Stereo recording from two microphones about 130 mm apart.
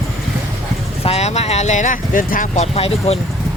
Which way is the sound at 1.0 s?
55° left (ahead or behind).